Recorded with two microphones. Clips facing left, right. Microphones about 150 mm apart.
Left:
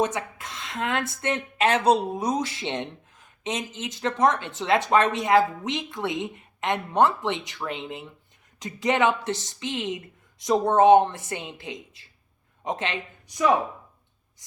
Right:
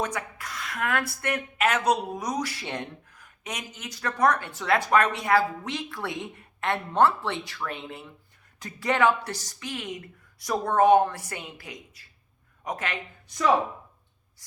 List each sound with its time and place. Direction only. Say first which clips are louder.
0.0 s speech: left 5 dB; 20° left (ahead or behind)